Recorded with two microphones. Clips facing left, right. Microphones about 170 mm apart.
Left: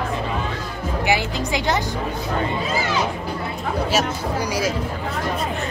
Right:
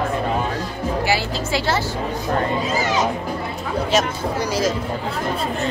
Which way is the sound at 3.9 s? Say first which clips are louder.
Right 4 dB; 10° left (ahead or behind).